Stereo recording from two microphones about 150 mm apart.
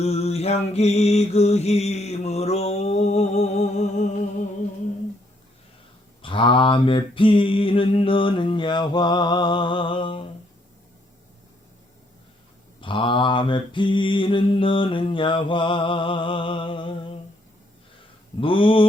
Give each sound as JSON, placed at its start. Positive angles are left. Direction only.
{"t": 0.0, "sound": "mantra", "side_deg": 45}
{"t": 6.2, "sound": "mantra", "side_deg": 35}
{"t": 12.8, "sound": "mantra", "side_deg": 35}
{"t": 18.3, "sound": "mantra", "side_deg": 35}